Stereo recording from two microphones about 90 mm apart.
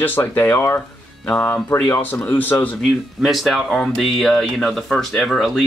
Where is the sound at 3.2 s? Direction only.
Centre (ahead or behind).